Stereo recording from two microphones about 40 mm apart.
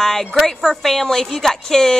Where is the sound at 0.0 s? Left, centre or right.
Centre.